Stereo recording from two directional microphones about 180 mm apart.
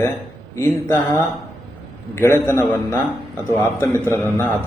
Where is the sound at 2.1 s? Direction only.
15° left (ahead or behind).